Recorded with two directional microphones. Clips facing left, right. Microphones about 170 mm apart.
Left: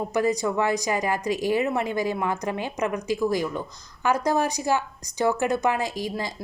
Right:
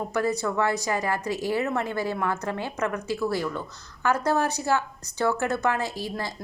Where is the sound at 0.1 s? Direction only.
15° left (ahead or behind).